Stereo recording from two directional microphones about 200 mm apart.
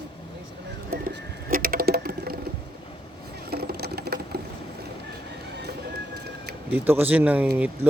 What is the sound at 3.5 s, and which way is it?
Sewing machine, 50° right (ahead or behind).